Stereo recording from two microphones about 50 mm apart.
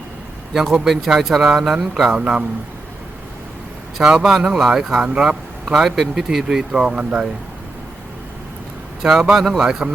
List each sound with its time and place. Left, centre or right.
0.9 s speech: centre
2.1 s a man's voice: centre
4.0 s speech: centre
9.0 s speech: centre
9.6 s speech: centre